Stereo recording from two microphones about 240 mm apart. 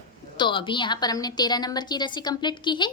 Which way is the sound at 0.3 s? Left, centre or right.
Centre.